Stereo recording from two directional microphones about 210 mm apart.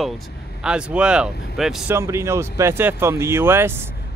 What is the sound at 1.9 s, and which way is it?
Speech, 15° right (ahead or behind).